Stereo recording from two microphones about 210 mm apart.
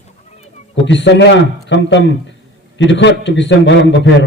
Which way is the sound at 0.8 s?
60° left (ahead or behind).